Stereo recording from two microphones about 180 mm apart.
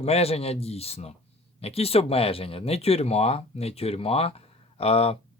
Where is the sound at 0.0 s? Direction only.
35° left (ahead or behind).